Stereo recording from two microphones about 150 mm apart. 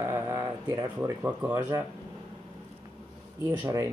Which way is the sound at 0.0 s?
15° right (ahead or behind).